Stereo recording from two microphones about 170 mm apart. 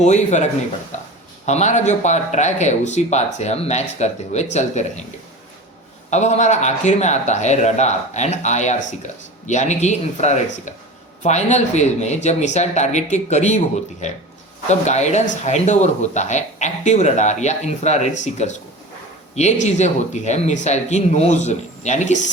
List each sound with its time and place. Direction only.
0.0 s speech: 40° left (ahead or behind)
1.5 s speech: 45° left (ahead or behind)
6.1 s speech: 40° left (ahead or behind)
19.6 s speech: 40° left (ahead or behind)